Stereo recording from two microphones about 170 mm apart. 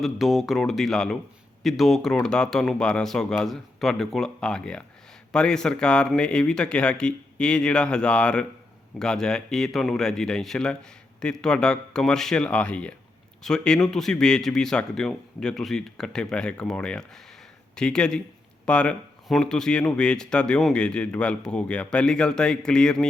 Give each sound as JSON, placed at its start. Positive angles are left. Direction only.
{"t": 0.0, "sound": "speech", "side_deg": 0}